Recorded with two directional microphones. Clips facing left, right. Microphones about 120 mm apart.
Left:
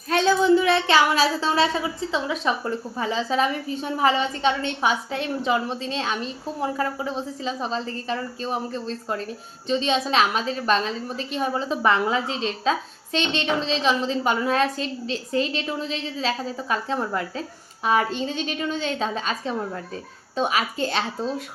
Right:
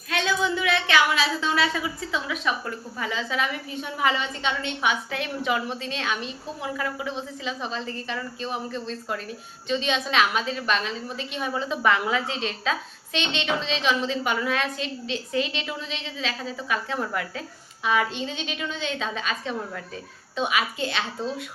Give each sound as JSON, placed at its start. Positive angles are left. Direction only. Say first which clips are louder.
{"t": 0.1, "sound": "a woman's voice", "louder": "left 7 dB", "side_deg": 35}